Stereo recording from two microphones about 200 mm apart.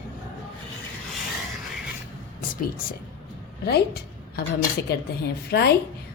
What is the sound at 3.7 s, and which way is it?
A woman's voice, 50° left (ahead or behind).